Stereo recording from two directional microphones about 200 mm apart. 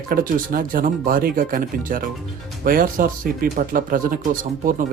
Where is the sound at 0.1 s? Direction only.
45° right (ahead or behind).